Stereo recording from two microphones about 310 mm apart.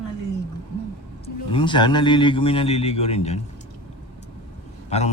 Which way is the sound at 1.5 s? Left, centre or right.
Centre.